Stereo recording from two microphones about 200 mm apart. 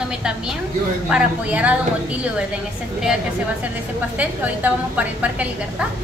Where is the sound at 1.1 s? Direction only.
5° right (ahead or behind).